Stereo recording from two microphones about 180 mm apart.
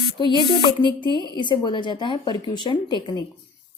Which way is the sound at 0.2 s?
25° left (ahead or behind).